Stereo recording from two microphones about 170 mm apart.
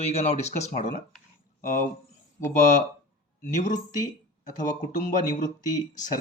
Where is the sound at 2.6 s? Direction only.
45° left (ahead or behind).